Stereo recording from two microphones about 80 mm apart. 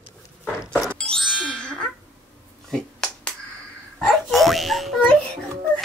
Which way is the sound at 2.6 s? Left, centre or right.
Centre.